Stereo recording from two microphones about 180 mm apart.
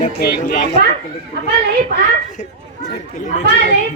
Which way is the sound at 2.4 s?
40° left (ahead or behind).